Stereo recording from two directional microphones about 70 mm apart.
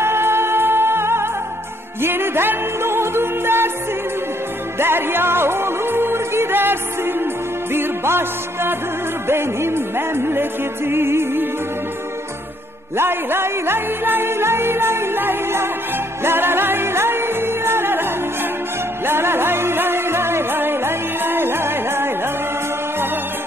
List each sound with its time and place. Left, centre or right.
0.0 s music: right
4.7 s music: right
12.9 s music: right
19.0 s music: right